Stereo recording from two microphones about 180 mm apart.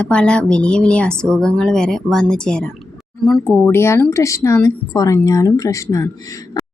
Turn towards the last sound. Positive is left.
turn(degrees=20)  # may be behind; listen again after turning